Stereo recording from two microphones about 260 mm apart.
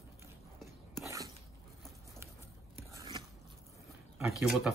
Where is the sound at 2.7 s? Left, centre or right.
Centre.